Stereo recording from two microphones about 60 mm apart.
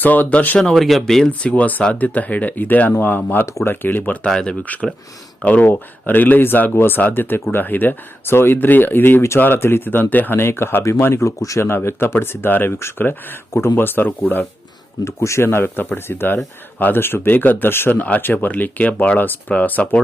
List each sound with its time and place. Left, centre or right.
0.0 s speech: left
0.8 s speech: centre
1.3 s speech: left
3.4 s speech: left
3.7 s speech: left
4.3 s speech: centre
4.6 s speech: left
11.7 s speech: left
15.0 s speech: left
15.4 s speech: left
16.7 s speech: left